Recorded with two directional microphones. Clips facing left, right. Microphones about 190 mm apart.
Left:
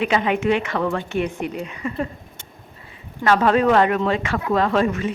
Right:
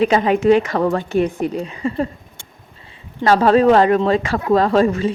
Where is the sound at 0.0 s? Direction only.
35° right (ahead or behind).